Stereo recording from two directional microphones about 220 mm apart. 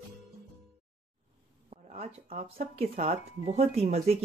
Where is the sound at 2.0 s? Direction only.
30° right (ahead or behind).